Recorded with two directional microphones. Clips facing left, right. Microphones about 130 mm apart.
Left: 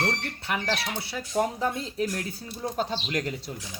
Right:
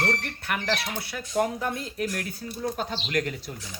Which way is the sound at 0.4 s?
25° left (ahead or behind).